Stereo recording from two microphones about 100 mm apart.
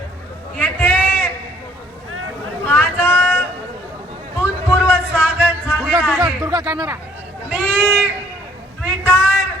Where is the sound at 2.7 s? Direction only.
20° left (ahead or behind).